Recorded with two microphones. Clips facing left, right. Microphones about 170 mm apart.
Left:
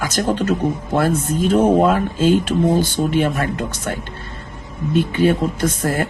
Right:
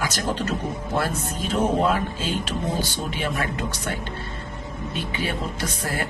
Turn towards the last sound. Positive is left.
turn(degrees=50)  # may be behind; listen again after turning